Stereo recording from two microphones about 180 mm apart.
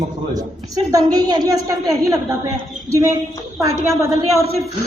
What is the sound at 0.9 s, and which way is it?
Speech, 20° right (ahead or behind).